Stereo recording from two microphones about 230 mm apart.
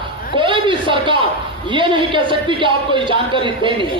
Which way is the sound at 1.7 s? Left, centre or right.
Right.